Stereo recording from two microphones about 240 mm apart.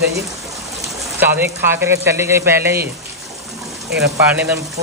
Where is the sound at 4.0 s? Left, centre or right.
Centre.